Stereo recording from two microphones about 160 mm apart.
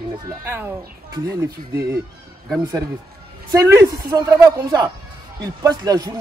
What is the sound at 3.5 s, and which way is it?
A woman's voice, 20° right (ahead or behind).